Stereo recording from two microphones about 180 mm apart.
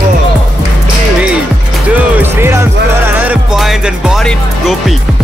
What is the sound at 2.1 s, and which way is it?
Music, 15° right (ahead or behind).